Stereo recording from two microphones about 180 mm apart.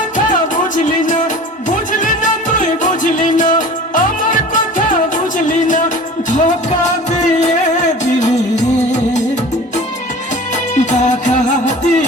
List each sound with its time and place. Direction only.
0.3 s music: 45° left (ahead or behind)
6.3 s music: 40° left (ahead or behind)
10.8 s music: 40° left (ahead or behind)